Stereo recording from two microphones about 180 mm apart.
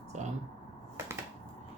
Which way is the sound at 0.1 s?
40° right (ahead or behind).